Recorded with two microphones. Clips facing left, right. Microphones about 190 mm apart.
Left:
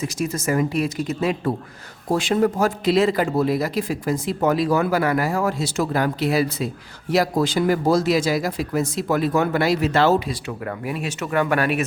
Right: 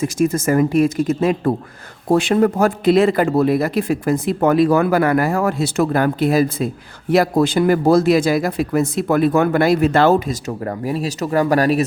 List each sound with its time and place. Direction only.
0.0 s a man's voice: 50° right (ahead or behind)
2.0 s a man's voice: 60° right (ahead or behind); by 11.9 s 35° right (ahead or behind)